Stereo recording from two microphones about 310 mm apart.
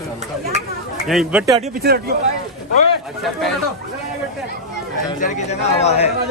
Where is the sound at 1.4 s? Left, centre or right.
Centre.